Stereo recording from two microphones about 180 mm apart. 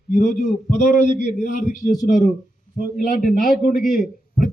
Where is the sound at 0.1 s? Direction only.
45° left (ahead or behind).